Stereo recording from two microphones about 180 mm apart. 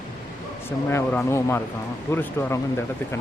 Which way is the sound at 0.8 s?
15° left (ahead or behind).